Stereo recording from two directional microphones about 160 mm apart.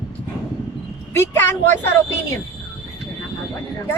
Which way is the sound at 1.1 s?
15° left (ahead or behind).